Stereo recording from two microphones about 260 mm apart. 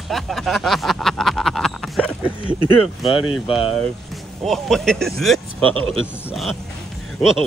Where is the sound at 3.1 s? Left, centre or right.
Centre.